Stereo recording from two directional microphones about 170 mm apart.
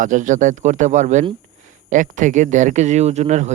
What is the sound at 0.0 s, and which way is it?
Speech, 50° right (ahead or behind).